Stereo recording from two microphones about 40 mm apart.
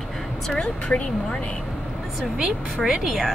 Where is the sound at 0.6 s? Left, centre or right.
Left.